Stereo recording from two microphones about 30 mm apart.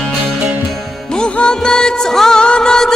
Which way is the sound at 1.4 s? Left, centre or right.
Left.